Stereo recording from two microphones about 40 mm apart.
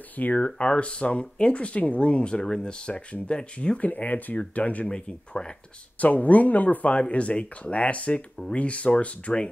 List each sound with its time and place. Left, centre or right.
0.1 s speech: left
0.6 s speech: left
4.8 s speech: left
5.9 s speech: left